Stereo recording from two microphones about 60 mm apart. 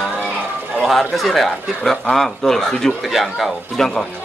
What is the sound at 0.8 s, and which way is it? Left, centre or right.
Speech, centre.